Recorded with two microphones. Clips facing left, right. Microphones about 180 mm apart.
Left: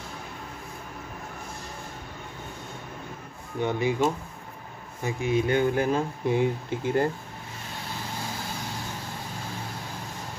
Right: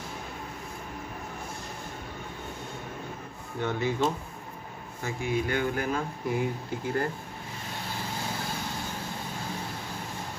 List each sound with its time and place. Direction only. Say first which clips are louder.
3.6 s speech: left 3 dB; 15° left (ahead or behind)